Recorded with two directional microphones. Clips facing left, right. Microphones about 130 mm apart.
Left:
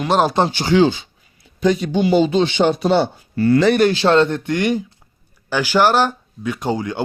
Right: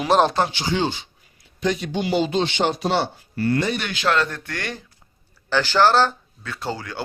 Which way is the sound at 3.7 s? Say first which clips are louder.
Left 9 dB; 35° left (ahead or behind).